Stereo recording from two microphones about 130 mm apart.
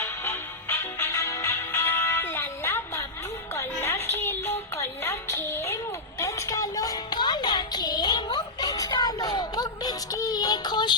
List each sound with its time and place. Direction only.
0.0 s music: 20° left (ahead or behind); by 10.9 s 35° left (ahead or behind)